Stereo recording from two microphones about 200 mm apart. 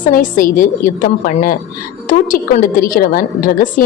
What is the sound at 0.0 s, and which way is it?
A woman's voice, 40° left (ahead or behind).